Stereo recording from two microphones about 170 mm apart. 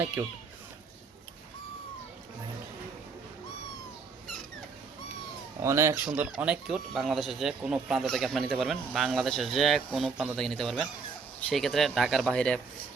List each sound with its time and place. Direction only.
0.0 s speech: 10° right (ahead or behind)
5.6 s speech: 15° right (ahead or behind)
6.3 s speech: 5° right (ahead or behind)